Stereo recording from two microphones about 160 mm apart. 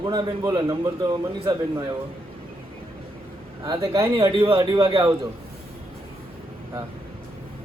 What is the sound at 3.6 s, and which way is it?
A man's voice, 20° right (ahead or behind).